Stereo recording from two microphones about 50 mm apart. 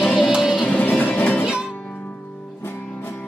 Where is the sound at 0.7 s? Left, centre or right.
Left.